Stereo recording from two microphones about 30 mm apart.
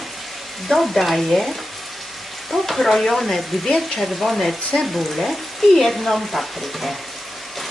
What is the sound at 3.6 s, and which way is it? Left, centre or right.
Speech, centre.